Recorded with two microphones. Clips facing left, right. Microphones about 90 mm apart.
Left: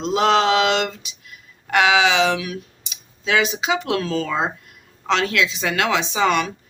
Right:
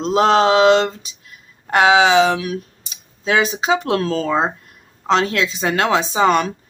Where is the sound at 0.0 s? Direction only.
35° right (ahead or behind).